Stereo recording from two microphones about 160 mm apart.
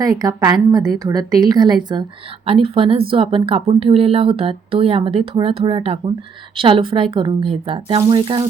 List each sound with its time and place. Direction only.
0.0 s a woman's voice: 20° right (ahead or behind)